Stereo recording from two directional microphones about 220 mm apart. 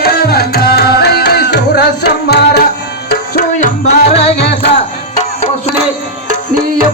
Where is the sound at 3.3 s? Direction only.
45° left (ahead or behind).